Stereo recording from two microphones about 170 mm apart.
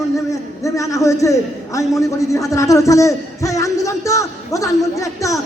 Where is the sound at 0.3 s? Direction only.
20° left (ahead or behind).